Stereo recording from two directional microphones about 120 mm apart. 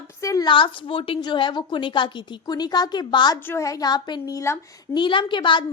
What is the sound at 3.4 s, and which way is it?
A woman's voice, 25° left (ahead or behind).